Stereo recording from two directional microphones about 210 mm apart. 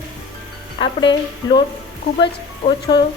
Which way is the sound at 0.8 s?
20° left (ahead or behind).